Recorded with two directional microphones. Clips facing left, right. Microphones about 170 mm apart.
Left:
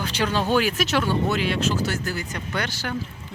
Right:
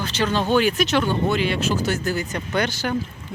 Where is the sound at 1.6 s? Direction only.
15° right (ahead or behind).